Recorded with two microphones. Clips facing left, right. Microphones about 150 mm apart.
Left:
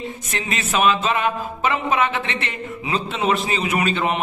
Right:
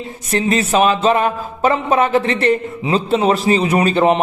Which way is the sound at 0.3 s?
35° right (ahead or behind).